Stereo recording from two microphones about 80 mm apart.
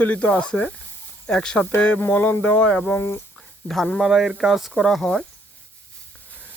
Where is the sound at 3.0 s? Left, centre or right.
Left.